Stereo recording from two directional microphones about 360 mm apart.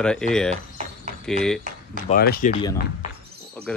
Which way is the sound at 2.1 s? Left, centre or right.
Left.